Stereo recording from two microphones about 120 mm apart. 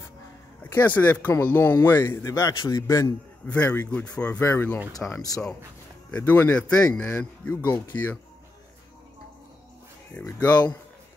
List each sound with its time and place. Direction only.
0.7 s a man's voice: 15° left (ahead or behind)
3.4 s speech: 10° left (ahead or behind)
5.3 s speech: 5° left (ahead or behind)
7.2 s speech: 20° left (ahead or behind)
10.2 s speech: 30° left (ahead or behind)